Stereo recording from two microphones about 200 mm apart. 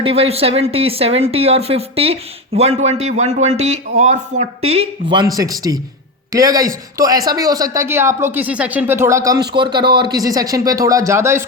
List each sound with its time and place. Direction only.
0.0 s a man's voice: 30° right (ahead or behind); by 11.4 s 15° right (ahead or behind)